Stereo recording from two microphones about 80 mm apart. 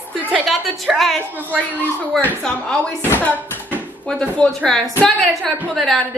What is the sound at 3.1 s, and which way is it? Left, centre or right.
Speech, left.